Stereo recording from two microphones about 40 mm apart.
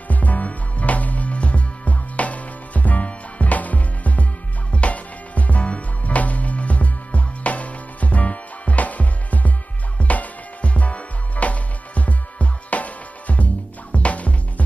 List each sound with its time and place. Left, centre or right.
0.1 s music: left